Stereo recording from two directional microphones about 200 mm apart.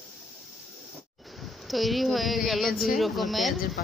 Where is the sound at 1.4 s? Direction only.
Centre (ahead or behind).